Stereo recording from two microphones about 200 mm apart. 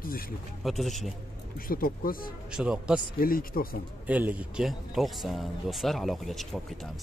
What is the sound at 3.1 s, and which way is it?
Speech, 45° left (ahead or behind).